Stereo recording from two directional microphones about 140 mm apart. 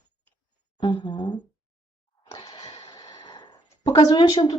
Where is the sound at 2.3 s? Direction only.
25° left (ahead or behind).